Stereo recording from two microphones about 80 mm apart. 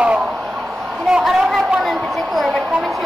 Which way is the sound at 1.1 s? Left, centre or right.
Centre.